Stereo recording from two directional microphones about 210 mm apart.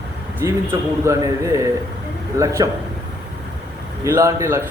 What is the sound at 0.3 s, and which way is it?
A man's voice, 10° right (ahead or behind).